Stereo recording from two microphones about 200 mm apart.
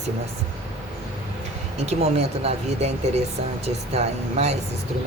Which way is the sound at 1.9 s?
30° right (ahead or behind).